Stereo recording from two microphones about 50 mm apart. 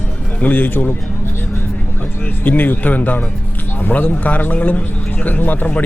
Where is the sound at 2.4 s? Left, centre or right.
Left.